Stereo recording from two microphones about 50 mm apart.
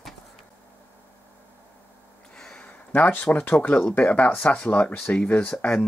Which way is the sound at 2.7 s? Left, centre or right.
Left.